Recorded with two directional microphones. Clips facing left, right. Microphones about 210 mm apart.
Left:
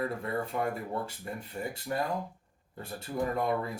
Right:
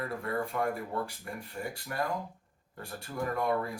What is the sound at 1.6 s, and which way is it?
Speech, 20° left (ahead or behind).